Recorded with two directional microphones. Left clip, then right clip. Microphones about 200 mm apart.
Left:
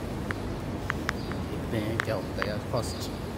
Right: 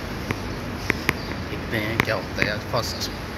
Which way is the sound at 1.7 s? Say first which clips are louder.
Right 7 dB; 5° left (ahead or behind).